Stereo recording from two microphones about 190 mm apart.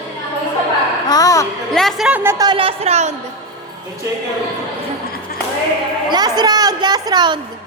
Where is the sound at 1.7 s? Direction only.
Centre (ahead or behind).